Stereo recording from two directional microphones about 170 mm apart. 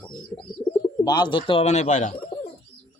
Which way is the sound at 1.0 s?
25° left (ahead or behind).